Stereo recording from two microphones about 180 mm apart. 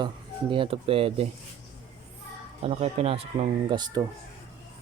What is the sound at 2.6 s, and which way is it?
Speech, 30° right (ahead or behind).